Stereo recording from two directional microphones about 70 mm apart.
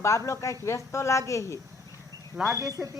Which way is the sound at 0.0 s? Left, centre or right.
Left.